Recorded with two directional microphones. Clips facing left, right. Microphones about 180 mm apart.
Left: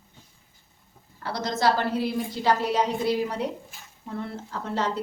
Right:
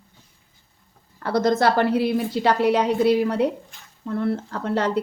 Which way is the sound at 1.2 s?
55° right (ahead or behind).